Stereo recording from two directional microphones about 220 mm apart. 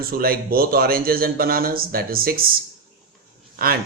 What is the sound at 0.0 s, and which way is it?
Speech, 45° right (ahead or behind).